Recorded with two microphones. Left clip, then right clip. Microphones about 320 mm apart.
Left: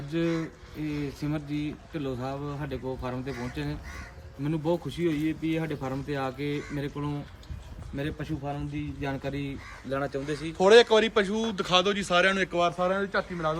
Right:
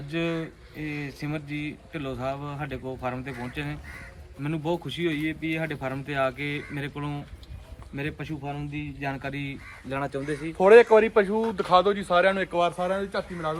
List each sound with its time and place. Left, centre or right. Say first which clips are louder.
0.1 s speech: even; centre
9.9 s speech: right 1 dB; right; by 13.6 s centre